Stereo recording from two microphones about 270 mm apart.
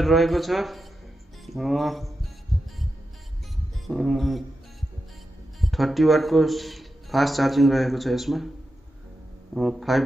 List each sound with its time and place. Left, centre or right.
0.0 s a man's voice: centre
1.4 s music: centre
3.8 s music: centre
5.6 s a man's voice: centre
9.5 s a man's voice: centre